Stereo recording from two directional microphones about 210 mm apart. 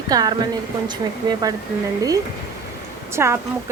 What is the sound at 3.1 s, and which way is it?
Speech, 10° right (ahead or behind).